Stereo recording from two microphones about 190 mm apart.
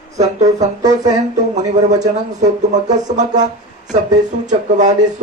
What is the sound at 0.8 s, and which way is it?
Speech, 20° right (ahead or behind).